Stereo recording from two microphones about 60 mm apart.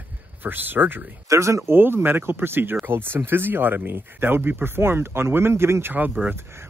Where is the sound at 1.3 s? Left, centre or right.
Right.